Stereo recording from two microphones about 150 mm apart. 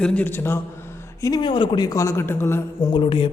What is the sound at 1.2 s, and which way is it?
A man's voice, 30° left (ahead or behind).